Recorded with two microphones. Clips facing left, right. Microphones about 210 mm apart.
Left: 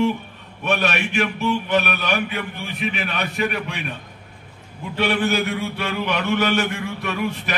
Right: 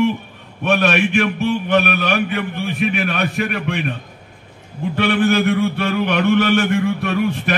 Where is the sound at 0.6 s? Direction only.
50° right (ahead or behind).